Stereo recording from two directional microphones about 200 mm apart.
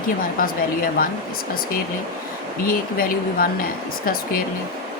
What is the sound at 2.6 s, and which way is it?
Speech, 45° left (ahead or behind).